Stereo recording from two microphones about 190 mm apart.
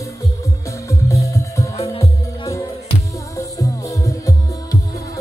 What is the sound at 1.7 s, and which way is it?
Music, 30° left (ahead or behind).